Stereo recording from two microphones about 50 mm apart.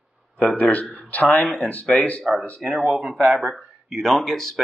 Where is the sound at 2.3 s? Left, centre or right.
Right.